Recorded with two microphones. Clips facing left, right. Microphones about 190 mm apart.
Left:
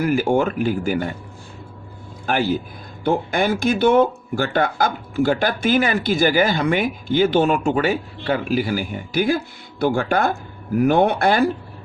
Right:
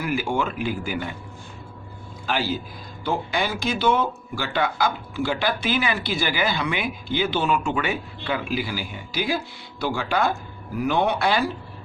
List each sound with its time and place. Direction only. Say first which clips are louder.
0.0 s speech: left 7 dB; 45° left (ahead or behind)
2.2 s speech: left 5 dB; 55° left (ahead or behind)